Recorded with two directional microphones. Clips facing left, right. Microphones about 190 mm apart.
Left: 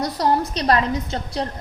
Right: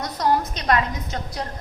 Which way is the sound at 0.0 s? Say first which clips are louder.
Left 2 dB; 30° left (ahead or behind).